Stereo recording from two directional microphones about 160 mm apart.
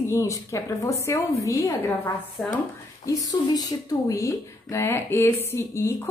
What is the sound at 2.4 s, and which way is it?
Speech, 5° left (ahead or behind).